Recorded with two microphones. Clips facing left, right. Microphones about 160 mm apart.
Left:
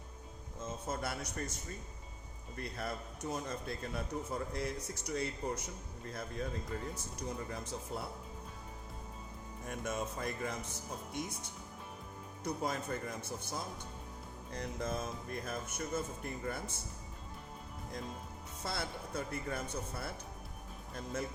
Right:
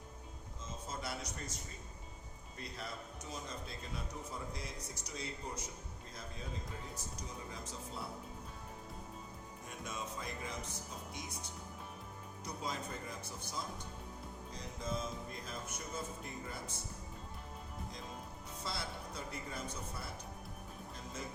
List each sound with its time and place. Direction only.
0.6 s a sound: 55° left (ahead or behind)
2.6 s speech: 55° left (ahead or behind)
9.6 s speech: 55° left (ahead or behind)
12.5 s speech: 55° left (ahead or behind)
18.6 s speech: 55° left (ahead or behind)